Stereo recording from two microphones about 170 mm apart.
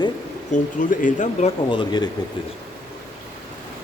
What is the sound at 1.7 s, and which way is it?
Speech, 25° left (ahead or behind).